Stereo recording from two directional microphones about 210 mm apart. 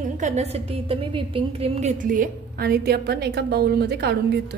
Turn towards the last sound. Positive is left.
turn(degrees=-50)  # may be behind; listen again after turning